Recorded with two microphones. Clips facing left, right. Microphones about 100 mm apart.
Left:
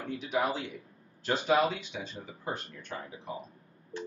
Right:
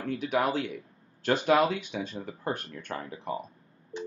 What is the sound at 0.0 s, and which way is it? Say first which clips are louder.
Speech: right 3 dB; 60° right (ahead or behind).